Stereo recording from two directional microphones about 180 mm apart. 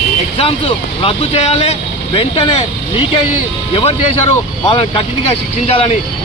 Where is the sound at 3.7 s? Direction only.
30° left (ahead or behind).